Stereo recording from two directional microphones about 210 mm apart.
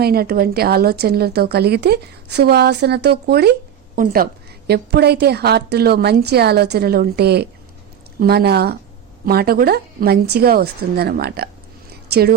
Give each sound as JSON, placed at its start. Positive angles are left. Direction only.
{"t": 0.0, "sound": "speech", "side_deg": -45}